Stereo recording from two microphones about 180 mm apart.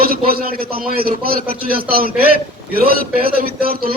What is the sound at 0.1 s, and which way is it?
A man's voice, 55° right (ahead or behind).